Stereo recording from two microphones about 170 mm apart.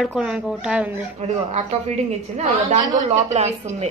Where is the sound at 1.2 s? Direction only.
40° right (ahead or behind).